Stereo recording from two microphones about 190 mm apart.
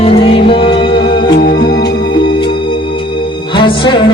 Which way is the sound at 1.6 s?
60° left (ahead or behind).